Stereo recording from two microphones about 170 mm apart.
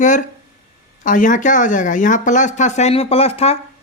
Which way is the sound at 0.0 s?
50° left (ahead or behind).